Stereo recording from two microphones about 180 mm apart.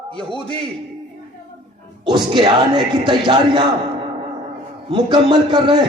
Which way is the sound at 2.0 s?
25° right (ahead or behind).